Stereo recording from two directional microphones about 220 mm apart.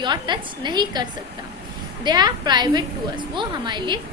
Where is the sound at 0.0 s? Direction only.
20° right (ahead or behind).